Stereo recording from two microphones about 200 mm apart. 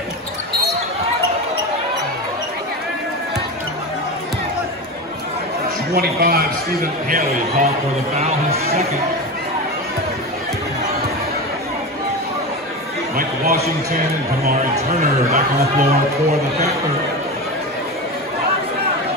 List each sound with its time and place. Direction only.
5.9 s a man's voice: 50° right (ahead or behind); by 8.6 s 30° right (ahead or behind)
13.1 s a man's voice: 45° right (ahead or behind)